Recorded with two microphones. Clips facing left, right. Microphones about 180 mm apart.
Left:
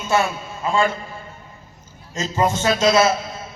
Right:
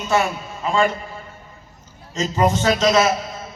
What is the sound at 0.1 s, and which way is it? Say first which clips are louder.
Speech: even; 15° right (ahead or behind).